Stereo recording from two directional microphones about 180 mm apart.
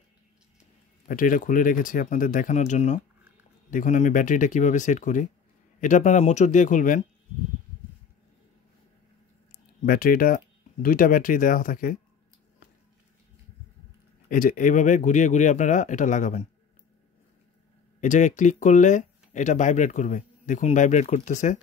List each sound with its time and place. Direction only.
1.0 s speech: 50° left (ahead or behind)
9.5 s speech: 50° left (ahead or behind)
14.3 s speech: 50° left (ahead or behind)
18.0 s speech: 45° left (ahead or behind)